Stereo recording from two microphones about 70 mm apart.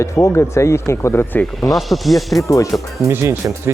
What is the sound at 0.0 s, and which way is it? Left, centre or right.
Speech, left.